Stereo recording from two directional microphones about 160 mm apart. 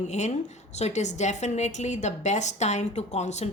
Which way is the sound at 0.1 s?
45° left (ahead or behind).